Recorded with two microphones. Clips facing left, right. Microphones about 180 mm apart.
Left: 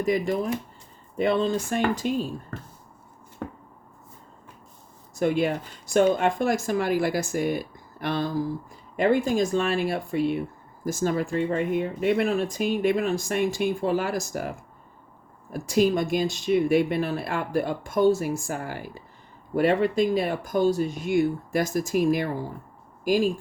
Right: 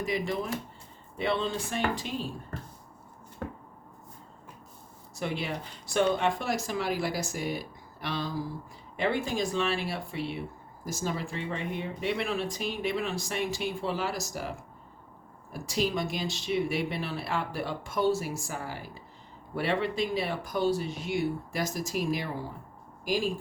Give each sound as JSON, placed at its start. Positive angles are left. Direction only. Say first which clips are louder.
{"t": 0.0, "sound": "speech", "louder": "left 7 dB", "side_deg": 45}
{"t": 5.1, "sound": "speech", "louder": "left 10 dB", "side_deg": 50}
{"t": 15.5, "sound": "speech", "louder": "left 8 dB", "side_deg": 50}